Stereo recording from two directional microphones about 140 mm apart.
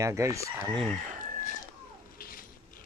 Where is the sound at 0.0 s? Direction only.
20° right (ahead or behind).